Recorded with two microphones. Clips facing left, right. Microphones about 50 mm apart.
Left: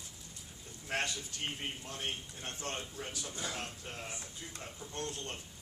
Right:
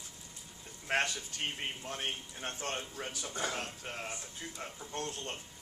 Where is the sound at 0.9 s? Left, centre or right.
Right.